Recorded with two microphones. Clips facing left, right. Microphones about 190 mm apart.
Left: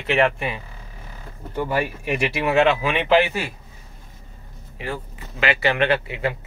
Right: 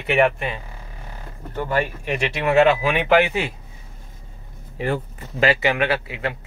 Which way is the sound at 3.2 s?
20° right (ahead or behind).